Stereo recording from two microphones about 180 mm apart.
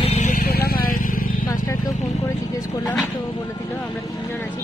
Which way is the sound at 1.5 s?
20° left (ahead or behind).